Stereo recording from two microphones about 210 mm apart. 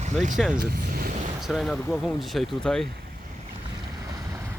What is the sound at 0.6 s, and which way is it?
Vehicle, 45° right (ahead or behind).